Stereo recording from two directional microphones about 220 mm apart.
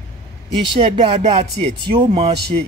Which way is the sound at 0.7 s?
25° right (ahead or behind).